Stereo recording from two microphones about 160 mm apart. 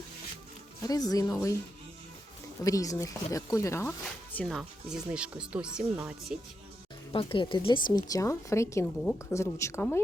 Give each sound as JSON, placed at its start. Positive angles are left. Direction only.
{"t": 0.8, "sound": "speech", "side_deg": 25}
{"t": 2.6, "sound": "speech", "side_deg": 20}
{"t": 4.4, "sound": "speech", "side_deg": 0}
{"t": 7.1, "sound": "speech", "side_deg": 30}